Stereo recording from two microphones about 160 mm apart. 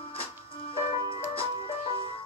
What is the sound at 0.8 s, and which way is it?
Music, 35° left (ahead or behind).